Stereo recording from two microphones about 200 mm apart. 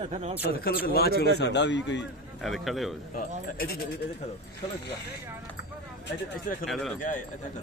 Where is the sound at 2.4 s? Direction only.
Centre (ahead or behind).